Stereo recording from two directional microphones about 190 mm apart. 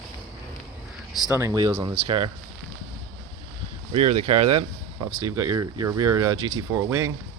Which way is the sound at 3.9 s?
30° right (ahead or behind).